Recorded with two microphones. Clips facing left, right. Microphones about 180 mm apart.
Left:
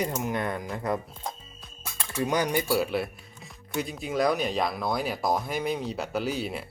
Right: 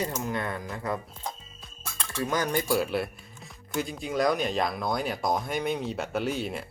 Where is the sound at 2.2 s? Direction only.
15° left (ahead or behind).